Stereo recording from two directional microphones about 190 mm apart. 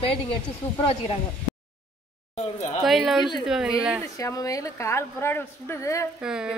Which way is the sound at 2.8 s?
Centre (ahead or behind).